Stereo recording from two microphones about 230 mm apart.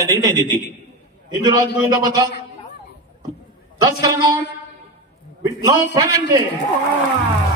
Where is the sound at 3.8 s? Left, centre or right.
Centre.